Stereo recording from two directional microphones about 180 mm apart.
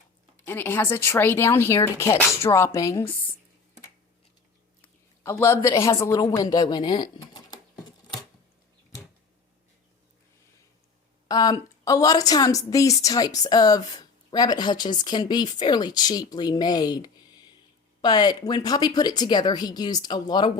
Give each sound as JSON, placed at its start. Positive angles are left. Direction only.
{"t": 0.4, "sound": "speech", "side_deg": 10}
{"t": 4.8, "sound": "a sound", "side_deg": 15}
{"t": 11.3, "sound": "a woman's voice", "side_deg": 20}